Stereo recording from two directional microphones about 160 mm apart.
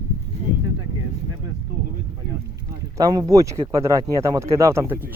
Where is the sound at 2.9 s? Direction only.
25° right (ahead or behind).